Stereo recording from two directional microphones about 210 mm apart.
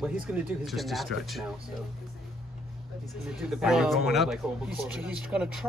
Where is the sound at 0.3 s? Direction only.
Centre (ahead or behind).